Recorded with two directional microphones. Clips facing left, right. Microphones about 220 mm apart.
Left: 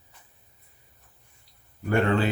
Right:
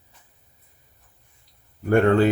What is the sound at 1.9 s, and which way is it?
Speech, 50° right (ahead or behind).